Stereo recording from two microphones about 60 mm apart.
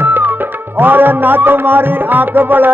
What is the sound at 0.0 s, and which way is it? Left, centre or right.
Music, right.